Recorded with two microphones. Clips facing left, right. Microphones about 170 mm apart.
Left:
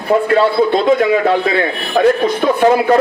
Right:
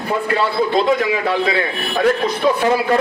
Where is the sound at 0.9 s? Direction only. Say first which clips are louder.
Left 5 dB; 50° left (ahead or behind).